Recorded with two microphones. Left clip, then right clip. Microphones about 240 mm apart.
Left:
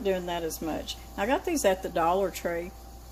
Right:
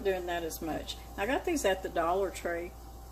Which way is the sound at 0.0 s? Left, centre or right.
Left.